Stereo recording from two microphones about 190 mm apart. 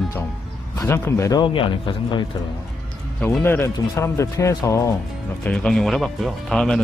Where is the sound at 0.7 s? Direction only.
15° left (ahead or behind).